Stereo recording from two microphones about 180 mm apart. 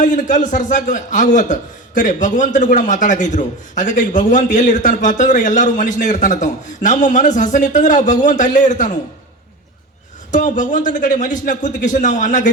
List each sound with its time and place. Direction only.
0.0 s a man's voice: 45° left (ahead or behind)
10.3 s a man's voice: 45° left (ahead or behind)